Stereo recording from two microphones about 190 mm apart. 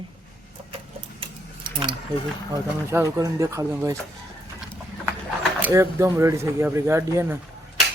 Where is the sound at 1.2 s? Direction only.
25° right (ahead or behind).